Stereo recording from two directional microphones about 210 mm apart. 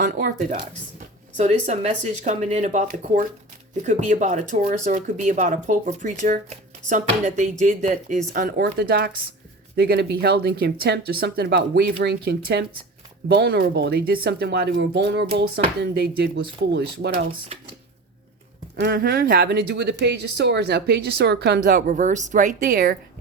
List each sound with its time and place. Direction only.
0.0 s speech: 40° right (ahead or behind)
18.8 s speech: 45° right (ahead or behind)